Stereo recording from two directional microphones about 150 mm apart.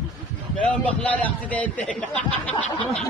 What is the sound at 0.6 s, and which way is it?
A man's voice, 10° left (ahead or behind).